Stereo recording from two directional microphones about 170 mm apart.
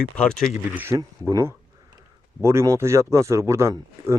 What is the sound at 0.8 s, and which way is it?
A man's voice, 15° right (ahead or behind).